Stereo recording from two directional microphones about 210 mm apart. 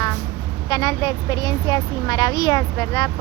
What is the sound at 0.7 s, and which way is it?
Speech, 20° left (ahead or behind).